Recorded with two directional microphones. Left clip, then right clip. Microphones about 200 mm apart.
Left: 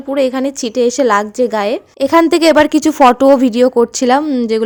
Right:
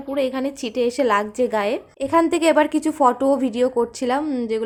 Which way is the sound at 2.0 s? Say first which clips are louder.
Left 9 dB; 45° left (ahead or behind).